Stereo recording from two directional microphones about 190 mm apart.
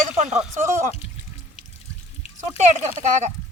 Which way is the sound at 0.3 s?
40° right (ahead or behind).